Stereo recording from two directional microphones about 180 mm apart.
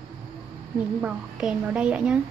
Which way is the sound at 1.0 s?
5° right (ahead or behind).